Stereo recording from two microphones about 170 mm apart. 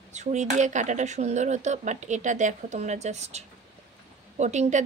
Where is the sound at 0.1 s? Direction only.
45° right (ahead or behind).